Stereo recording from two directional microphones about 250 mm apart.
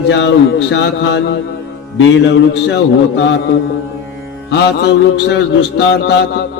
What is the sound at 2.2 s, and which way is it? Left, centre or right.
Mantra, left.